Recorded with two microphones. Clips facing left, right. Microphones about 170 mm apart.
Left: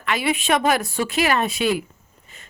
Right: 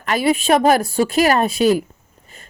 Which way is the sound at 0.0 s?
40° right (ahead or behind).